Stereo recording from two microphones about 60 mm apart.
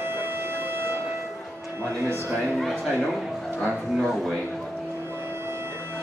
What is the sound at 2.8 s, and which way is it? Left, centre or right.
Speech, centre.